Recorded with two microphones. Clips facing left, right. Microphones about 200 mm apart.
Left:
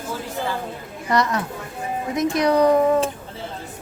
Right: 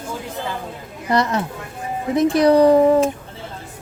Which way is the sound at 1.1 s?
30° right (ahead or behind).